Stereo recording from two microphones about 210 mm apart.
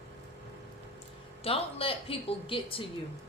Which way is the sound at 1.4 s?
25° left (ahead or behind).